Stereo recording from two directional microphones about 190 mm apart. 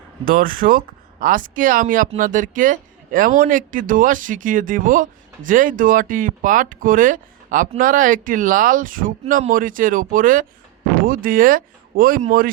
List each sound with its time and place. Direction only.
0.3 s speech: 45° right (ahead or behind)